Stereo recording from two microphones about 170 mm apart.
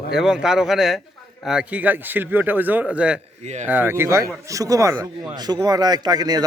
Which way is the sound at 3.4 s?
45° right (ahead or behind).